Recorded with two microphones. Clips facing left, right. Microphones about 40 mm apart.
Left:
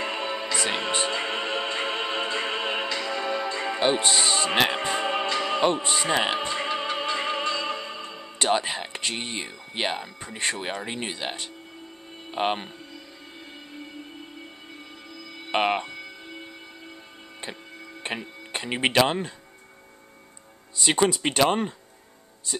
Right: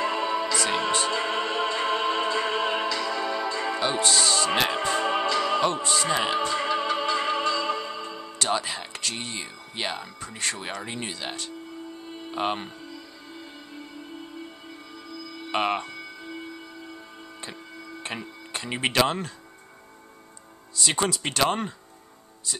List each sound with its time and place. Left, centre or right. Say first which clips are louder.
0.0 s music: right 4 dB; left
12.3 s speech: left 2 dB; left
15.5 s speech: left 2 dB; left
18.0 s speech: left 3 dB; left
20.7 s speech: left 3 dB; left